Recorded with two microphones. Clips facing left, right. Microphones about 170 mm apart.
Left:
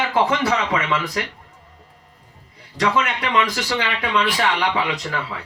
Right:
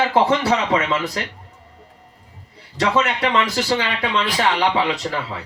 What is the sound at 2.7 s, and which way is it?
Speech, 30° right (ahead or behind).